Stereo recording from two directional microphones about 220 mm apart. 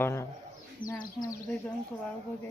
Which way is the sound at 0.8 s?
40° left (ahead or behind).